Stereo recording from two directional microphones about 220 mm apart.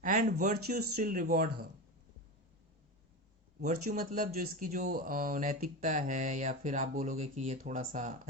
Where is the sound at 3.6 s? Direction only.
40° right (ahead or behind).